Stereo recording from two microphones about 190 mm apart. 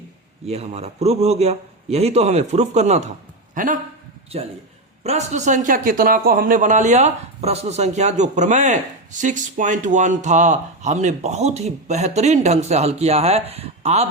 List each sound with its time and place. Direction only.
0.4 s a man's voice: 35° right (ahead or behind)
5.0 s a man's voice: 35° right (ahead or behind)